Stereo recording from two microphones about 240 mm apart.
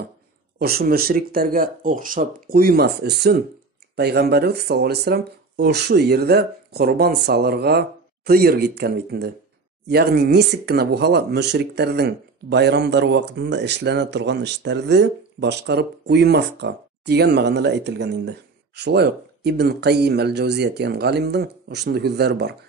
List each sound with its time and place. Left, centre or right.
0.6 s speech: right